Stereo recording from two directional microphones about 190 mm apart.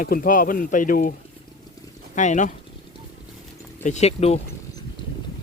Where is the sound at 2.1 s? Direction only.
40° left (ahead or behind).